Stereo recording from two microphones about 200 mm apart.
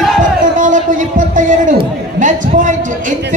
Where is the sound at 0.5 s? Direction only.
40° right (ahead or behind).